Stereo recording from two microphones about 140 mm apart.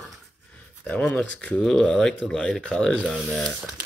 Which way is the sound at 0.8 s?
10° left (ahead or behind).